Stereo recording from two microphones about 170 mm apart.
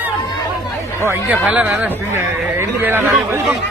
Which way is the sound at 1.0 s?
15° right (ahead or behind).